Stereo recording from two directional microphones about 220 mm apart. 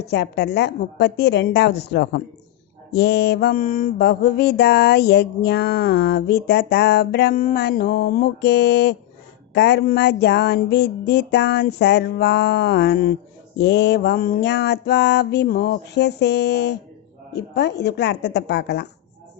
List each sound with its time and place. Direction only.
0.1 s mantra: 50° left (ahead or behind)